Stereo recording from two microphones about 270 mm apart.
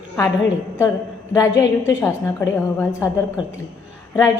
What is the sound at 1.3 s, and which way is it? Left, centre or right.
A woman's voice, centre.